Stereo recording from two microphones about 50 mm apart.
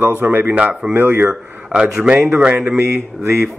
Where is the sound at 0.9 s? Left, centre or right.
Right.